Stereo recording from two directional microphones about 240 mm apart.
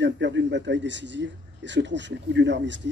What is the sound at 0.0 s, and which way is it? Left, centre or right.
Speech, right.